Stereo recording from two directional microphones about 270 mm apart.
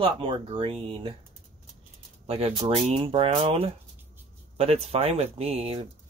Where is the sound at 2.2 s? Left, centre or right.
Right.